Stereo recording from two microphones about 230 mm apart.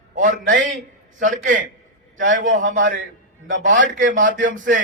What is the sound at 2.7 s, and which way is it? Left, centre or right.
A man's voice, right.